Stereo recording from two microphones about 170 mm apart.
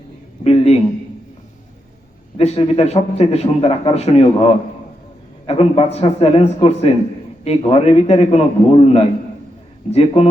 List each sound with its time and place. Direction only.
0.4 s a man's voice: 40° left (ahead or behind)
2.4 s a man's voice: 35° left (ahead or behind)